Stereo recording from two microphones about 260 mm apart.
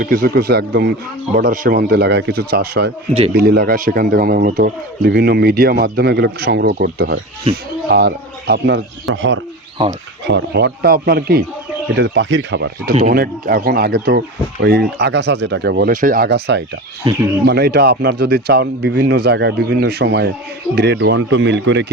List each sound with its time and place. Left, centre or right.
0.0 s a man's voice: right